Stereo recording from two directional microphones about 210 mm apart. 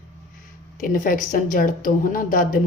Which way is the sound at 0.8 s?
40° left (ahead or behind).